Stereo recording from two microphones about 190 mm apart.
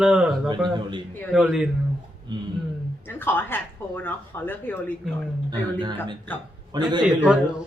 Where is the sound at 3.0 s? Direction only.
10° left (ahead or behind).